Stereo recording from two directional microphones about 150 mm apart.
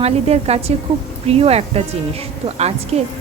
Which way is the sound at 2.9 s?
45° right (ahead or behind).